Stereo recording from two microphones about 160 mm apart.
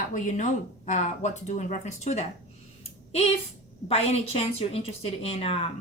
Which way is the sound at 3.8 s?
40° left (ahead or behind).